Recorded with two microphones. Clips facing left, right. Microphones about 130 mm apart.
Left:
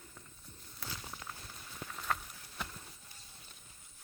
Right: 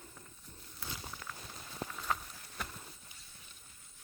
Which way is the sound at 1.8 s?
40° right (ahead or behind).